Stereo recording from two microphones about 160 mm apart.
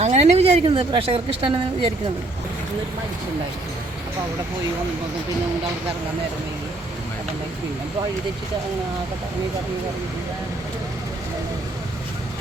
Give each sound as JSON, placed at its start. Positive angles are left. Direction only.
{"t": 0.0, "sound": "a woman's voice", "side_deg": -45}